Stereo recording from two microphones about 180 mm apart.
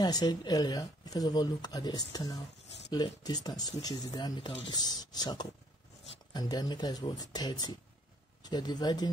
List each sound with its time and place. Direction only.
0.0 s speech: 20° left (ahead or behind)